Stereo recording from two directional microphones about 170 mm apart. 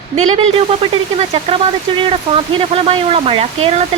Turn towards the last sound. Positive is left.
turn(degrees=-35)  # may be behind; listen again after turning